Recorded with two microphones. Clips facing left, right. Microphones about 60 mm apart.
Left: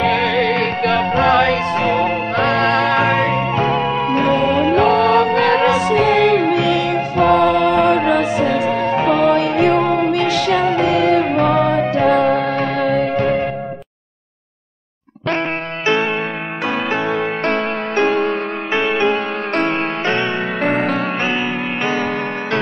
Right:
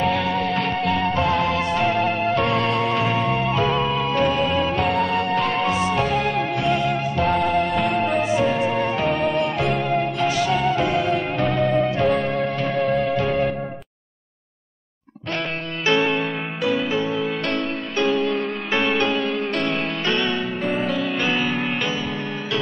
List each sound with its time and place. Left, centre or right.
0.0 s music: left
3.5 s music: left
4.3 s music: left
13.1 s music: left
16.6 s music: left
17.6 s music: left
18.7 s music: left
19.1 s music: left
20.1 s music: left
20.6 s music: left